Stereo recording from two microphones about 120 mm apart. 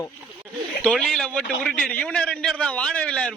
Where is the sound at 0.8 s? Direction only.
5° left (ahead or behind).